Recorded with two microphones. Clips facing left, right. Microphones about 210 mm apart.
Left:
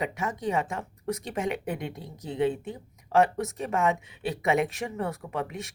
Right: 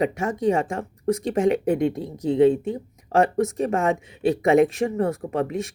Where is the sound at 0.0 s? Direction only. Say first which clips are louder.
Right 8 dB; 40° right (ahead or behind).